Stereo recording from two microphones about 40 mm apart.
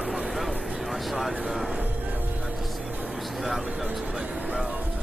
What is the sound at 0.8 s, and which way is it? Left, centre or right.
Vehicle, centre.